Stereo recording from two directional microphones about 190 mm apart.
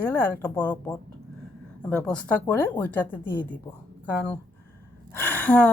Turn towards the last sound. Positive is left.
turn(degrees=5)  # may be behind; listen again after turning